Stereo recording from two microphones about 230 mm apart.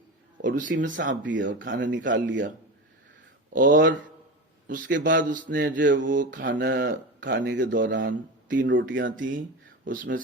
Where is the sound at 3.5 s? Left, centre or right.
Right.